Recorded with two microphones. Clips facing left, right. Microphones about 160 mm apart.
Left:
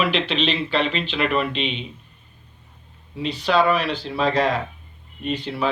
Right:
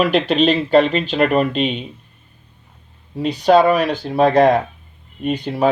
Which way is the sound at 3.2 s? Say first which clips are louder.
Right 7 dB; 45° right (ahead or behind).